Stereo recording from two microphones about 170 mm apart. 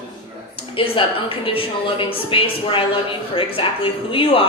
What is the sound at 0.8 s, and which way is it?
A woman's voice, 30° left (ahead or behind).